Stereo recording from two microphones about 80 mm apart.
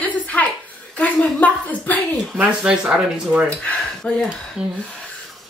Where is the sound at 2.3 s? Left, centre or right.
Centre.